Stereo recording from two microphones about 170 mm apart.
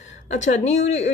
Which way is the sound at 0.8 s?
45° left (ahead or behind).